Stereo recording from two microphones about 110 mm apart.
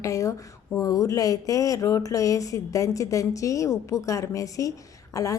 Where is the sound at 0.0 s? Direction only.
30° left (ahead or behind).